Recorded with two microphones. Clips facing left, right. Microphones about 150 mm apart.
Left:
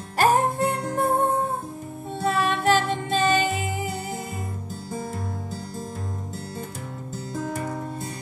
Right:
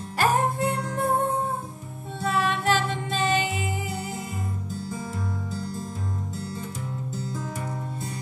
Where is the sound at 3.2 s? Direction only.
50° left (ahead or behind).